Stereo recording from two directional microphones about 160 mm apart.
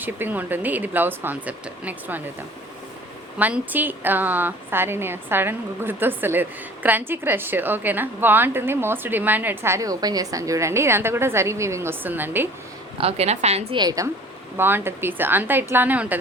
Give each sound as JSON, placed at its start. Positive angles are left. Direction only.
{"t": 0.0, "sound": "a woman's voice", "side_deg": -10}
{"t": 3.3, "sound": "a woman's voice", "side_deg": -10}
{"t": 13.0, "sound": "a woman's voice", "side_deg": -40}
{"t": 13.7, "sound": "a woman's voice", "side_deg": -25}